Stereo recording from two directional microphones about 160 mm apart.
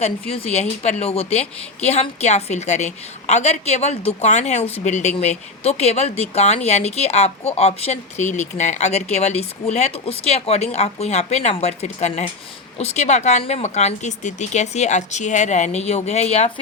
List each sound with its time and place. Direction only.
0.0 s speech: 40° left (ahead or behind)